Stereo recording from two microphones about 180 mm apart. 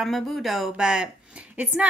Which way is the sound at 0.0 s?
Centre (ahead or behind).